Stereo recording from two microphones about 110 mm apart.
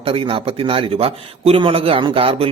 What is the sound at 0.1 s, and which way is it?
Speech, 55° right (ahead or behind).